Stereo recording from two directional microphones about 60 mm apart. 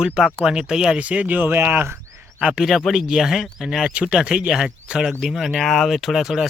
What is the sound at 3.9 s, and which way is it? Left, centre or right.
Speech, centre.